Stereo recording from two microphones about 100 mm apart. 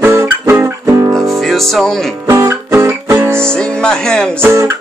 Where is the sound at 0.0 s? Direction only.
30° right (ahead or behind).